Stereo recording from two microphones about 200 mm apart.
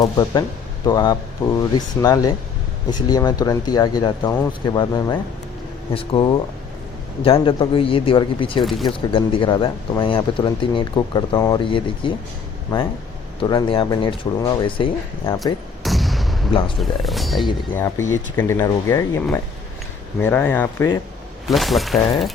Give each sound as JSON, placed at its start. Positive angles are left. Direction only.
{"t": 0.0, "sound": "speech", "side_deg": 20}
{"t": 13.4, "sound": "speech", "side_deg": 25}
{"t": 15.8, "sound": "artillery fire", "side_deg": 0}
{"t": 16.5, "sound": "speech", "side_deg": 25}
{"t": 16.8, "sound": "speech", "side_deg": 0}
{"t": 17.7, "sound": "speech", "side_deg": 15}
{"t": 21.4, "sound": "speech", "side_deg": 0}